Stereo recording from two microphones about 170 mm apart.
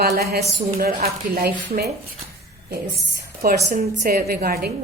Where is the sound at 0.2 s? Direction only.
65° right (ahead or behind).